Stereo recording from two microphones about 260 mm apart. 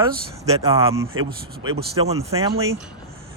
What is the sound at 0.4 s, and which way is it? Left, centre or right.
Speech, right.